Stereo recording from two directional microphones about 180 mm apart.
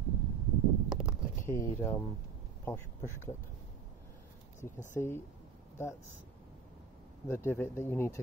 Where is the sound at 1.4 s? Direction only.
15° left (ahead or behind).